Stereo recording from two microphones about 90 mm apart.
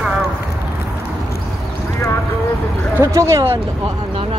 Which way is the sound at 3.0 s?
35° right (ahead or behind).